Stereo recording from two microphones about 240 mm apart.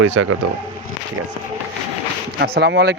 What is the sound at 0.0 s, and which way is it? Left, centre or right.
Speech, right.